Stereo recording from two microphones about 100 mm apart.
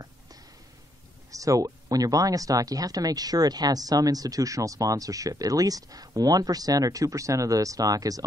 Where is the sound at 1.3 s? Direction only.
35° right (ahead or behind).